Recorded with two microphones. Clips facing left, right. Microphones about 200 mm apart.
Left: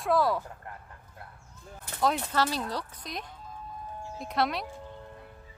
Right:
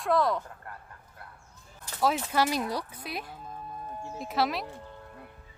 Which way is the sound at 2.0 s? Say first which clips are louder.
Right 1 dB; 5° right (ahead or behind).